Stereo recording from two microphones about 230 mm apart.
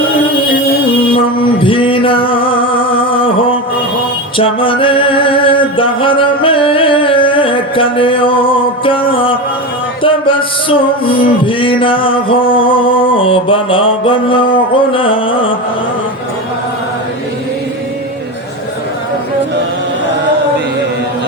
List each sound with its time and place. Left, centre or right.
1.6 s music: left